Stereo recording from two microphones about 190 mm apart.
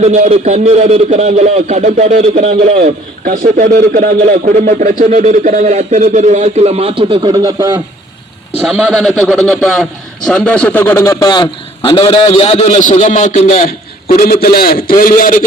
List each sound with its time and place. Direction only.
0.0 s speech: 35° right (ahead or behind)
3.2 s speech: 45° right (ahead or behind); by 7.7 s 20° right (ahead or behind)
8.6 s a man's voice: 5° right (ahead or behind); by 15.4 s 45° left (ahead or behind)